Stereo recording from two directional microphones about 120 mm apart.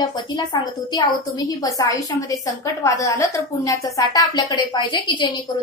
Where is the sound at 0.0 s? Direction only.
35° left (ahead or behind).